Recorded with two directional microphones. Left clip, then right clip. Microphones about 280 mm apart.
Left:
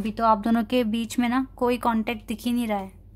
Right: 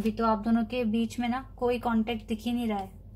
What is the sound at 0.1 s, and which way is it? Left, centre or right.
A woman's voice, left.